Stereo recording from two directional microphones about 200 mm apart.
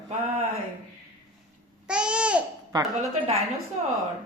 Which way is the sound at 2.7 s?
20° right (ahead or behind).